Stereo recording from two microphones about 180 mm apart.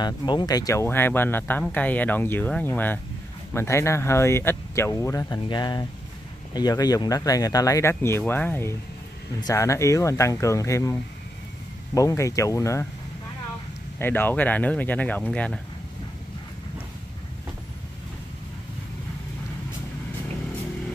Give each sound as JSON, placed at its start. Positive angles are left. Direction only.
{"t": 0.0, "sound": "speech", "side_deg": 25}
{"t": 13.9, "sound": "speech", "side_deg": 10}